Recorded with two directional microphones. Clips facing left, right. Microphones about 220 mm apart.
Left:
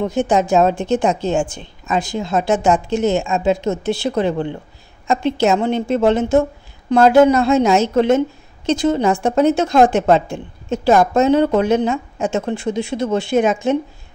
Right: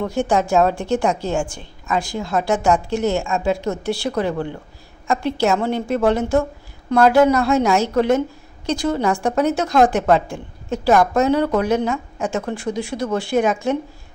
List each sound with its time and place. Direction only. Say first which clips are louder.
0.0 s a woman's voice: left 2 dB; 20° left (ahead or behind)